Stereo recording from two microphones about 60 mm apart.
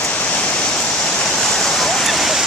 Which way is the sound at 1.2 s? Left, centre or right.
Centre.